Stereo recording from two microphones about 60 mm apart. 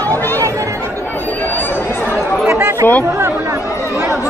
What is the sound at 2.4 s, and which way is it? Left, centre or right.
Chatter, right.